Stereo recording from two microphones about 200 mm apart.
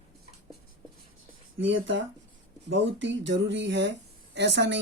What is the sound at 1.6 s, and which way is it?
Speech, 70° right (ahead or behind).